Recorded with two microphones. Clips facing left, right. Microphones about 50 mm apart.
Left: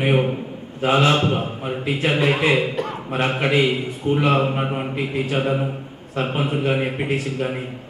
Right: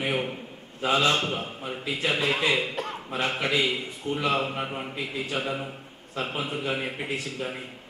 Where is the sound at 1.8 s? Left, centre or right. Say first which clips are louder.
Left 6 dB; left.